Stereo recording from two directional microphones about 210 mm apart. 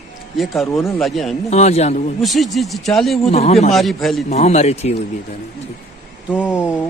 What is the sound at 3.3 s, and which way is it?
Speech, 30° left (ahead or behind).